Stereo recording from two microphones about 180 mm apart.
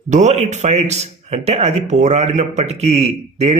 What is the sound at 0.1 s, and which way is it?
Speech, 40° right (ahead or behind).